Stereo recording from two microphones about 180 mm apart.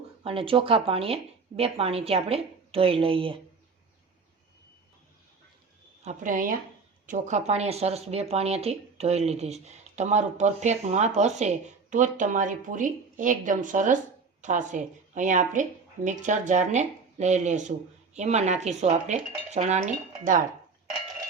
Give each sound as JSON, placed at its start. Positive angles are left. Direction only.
{"t": 0.2, "sound": "speech", "side_deg": -30}
{"t": 6.0, "sound": "speech", "side_deg": -45}